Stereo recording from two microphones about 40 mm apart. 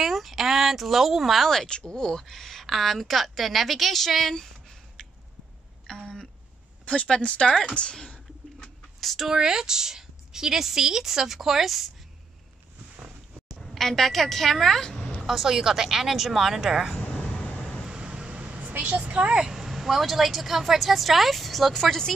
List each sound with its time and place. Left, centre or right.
0.0 s a sound: centre
1.5 s a woman's voice: centre
5.9 s a sound: centre
6.9 s speech: left
9.0 s speech: centre
9.3 s speech: centre
13.7 s a woman's voice: centre
14.9 s a sound: left
15.2 s speech: centre
17.2 s vehicle: left
17.8 s vehicle: right
18.8 s a woman's voice: right
19.3 s a woman's voice: centre